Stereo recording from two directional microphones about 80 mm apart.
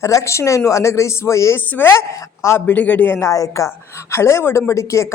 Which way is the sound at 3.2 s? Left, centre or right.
Left.